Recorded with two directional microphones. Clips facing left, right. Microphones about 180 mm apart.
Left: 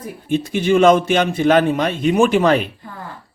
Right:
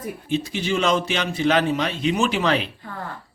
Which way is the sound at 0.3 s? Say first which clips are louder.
Left 7 dB; 55° left (ahead or behind).